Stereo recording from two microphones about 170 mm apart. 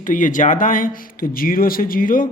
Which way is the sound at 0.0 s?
50° left (ahead or behind).